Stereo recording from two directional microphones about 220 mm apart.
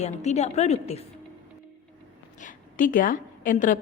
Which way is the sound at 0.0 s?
30° left (ahead or behind).